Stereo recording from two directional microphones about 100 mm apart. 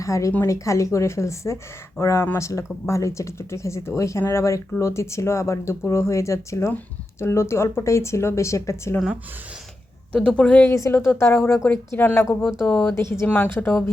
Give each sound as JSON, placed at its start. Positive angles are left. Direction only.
{"t": 0.0, "sound": "a woman's voice", "side_deg": 30}
{"t": 10.2, "sound": "speech", "side_deg": 10}
{"t": 10.7, "sound": "speech", "side_deg": 30}
{"t": 12.4, "sound": "speech", "side_deg": -5}
{"t": 12.6, "sound": "speech", "side_deg": 15}
{"t": 12.9, "sound": "speech", "side_deg": 25}
{"t": 13.2, "sound": "speech", "side_deg": 15}